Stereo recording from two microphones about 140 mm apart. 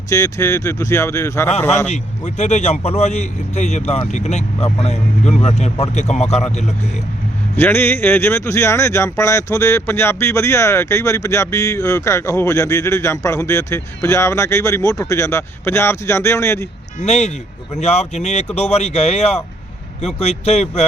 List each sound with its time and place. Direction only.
0.1 s a man's voice: 20° left (ahead or behind)
1.9 s a man's voice: 55° left (ahead or behind)
7.5 s speech: 15° left (ahead or behind)
17.0 s a man's voice: 55° left (ahead or behind)